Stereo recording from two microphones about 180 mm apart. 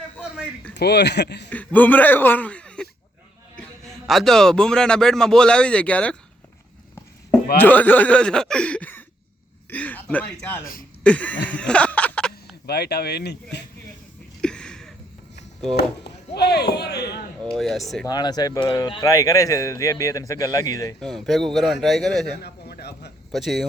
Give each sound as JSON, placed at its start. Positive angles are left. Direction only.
{"t": 0.7, "sound": "speech", "side_deg": 65}
{"t": 1.5, "sound": "a man's voice", "side_deg": 10}
{"t": 7.5, "sound": "speech", "side_deg": 10}
{"t": 11.0, "sound": "a sound", "side_deg": 5}
{"t": 12.6, "sound": "speech", "side_deg": 65}
{"t": 14.4, "sound": "a sound", "side_deg": 5}
{"t": 15.7, "sound": "speech", "side_deg": 65}
{"t": 17.5, "sound": "a man's voice", "side_deg": 0}
{"t": 18.0, "sound": "speech", "side_deg": 25}
{"t": 21.0, "sound": "a man's voice", "side_deg": 0}
{"t": 22.4, "sound": "speech", "side_deg": 65}
{"t": 23.3, "sound": "a man's voice", "side_deg": 0}